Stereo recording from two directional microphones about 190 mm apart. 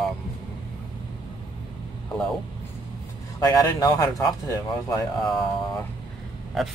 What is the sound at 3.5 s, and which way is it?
Speech, 20° left (ahead or behind).